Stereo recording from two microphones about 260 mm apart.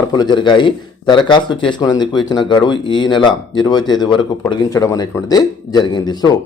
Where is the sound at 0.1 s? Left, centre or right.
Centre.